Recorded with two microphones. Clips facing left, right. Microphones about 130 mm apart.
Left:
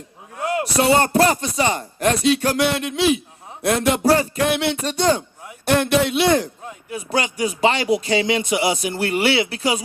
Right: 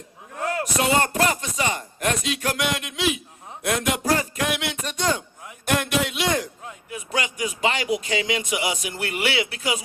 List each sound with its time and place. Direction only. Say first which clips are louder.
0.6 s speech: left 5 dB; 35° left (ahead or behind)